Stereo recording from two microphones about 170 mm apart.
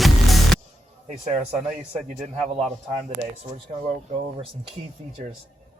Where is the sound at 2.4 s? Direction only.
Centre (ahead or behind).